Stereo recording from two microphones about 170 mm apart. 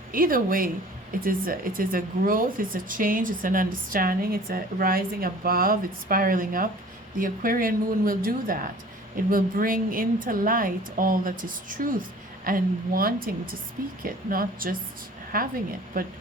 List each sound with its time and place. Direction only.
0.1 s speech: 55° right (ahead or behind)